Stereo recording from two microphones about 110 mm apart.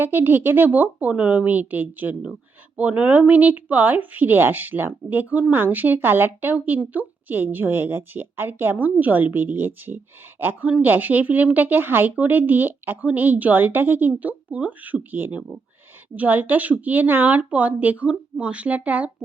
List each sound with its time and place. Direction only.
0.0 s a woman's voice: 20° right (ahead or behind)